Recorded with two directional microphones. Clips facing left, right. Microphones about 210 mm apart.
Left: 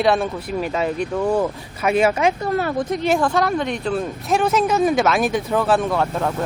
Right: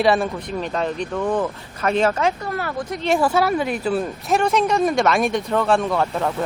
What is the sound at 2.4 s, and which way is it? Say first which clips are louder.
Speech: left 5 dB; 25° left (ahead or behind).